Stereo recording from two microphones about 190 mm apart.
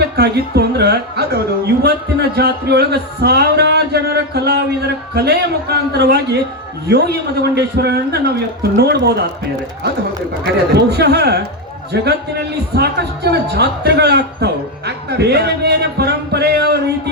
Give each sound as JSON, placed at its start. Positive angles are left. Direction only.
{"t": 0.2, "sound": "a man's voice", "side_deg": -60}
{"t": 10.4, "sound": "a man's voice", "side_deg": -60}